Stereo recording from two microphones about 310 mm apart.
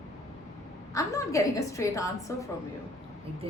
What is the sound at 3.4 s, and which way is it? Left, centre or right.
Speech, centre.